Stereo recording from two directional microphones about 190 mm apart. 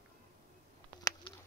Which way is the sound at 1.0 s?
25° left (ahead or behind).